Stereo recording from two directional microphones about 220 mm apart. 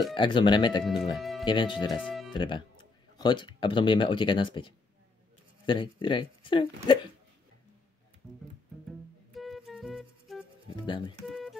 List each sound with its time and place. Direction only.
0.1 s speech: 20° left (ahead or behind)
1.1 s speech: centre (ahead or behind)
1.4 s speech: 20° left (ahead or behind)
2.0 s music: 5° left (ahead or behind)
2.3 s speech: 20° left (ahead or behind)
9.3 s music: centre (ahead or behind)
10.8 s speech: 20° left (ahead or behind)
11.2 s music: centre (ahead or behind)